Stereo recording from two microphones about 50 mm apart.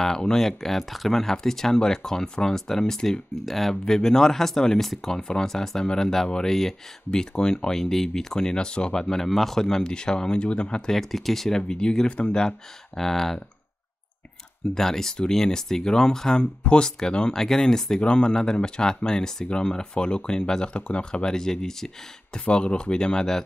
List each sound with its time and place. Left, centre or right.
0.0 s speech: centre
10.9 s speech: centre
14.7 s speech: centre
22.4 s speech: left